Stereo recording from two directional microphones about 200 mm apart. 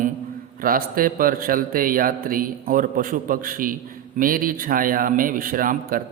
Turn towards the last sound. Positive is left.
turn(degrees=-45)  # may be behind; listen again after turning